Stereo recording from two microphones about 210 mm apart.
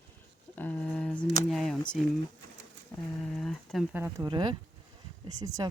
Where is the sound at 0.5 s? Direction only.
5° left (ahead or behind).